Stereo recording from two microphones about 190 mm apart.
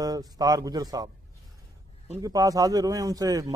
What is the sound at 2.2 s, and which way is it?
Speech, 20° right (ahead or behind).